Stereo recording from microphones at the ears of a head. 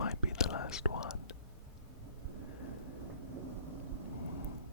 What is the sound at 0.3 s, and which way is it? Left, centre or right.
Whispering, left.